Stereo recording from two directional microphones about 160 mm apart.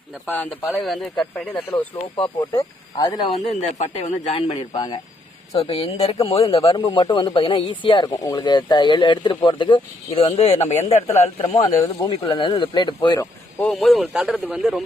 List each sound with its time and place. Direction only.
0.3 s a man's voice: 5° left (ahead or behind)
1.7 s speech: 35° left (ahead or behind)
3.3 s speech: 45° left (ahead or behind)
11.6 s speech: 30° left (ahead or behind)
13.7 s a man's voice: centre (ahead or behind)